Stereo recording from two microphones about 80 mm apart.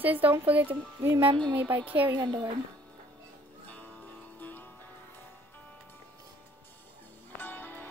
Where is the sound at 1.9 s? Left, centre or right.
Centre.